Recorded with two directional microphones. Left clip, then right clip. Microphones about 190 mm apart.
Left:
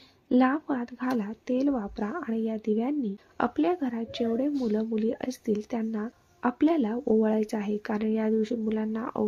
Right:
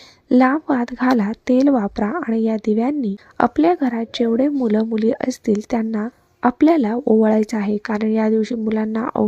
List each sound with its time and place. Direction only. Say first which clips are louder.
0.3 s speech: right 9 dB; 35° right (ahead or behind)